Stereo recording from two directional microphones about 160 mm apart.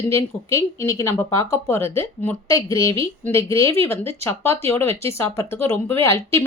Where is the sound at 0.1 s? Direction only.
15° left (ahead or behind).